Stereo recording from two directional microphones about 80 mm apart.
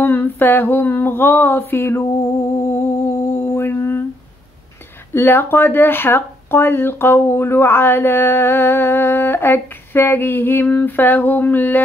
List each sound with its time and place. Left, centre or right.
0.0 s speech: left
2.6 s a sound: left
5.1 s speech: left